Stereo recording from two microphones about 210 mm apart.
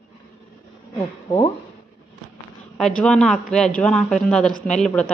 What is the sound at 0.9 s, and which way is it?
Speech, 20° left (ahead or behind).